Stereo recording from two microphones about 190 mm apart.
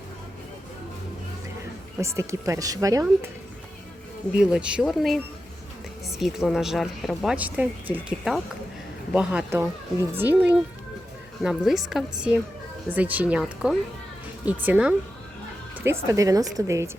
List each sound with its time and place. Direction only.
2.0 s speech: 15° right (ahead or behind)
4.4 s speech: 5° right (ahead or behind)